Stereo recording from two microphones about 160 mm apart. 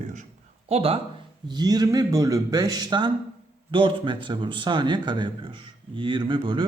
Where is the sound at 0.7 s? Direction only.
35° right (ahead or behind).